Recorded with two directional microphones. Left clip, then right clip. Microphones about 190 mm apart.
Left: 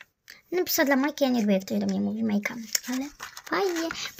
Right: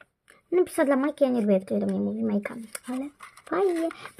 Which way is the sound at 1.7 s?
20° left (ahead or behind).